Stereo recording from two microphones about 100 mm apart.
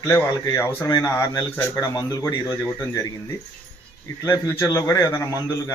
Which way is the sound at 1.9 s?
30° left (ahead or behind).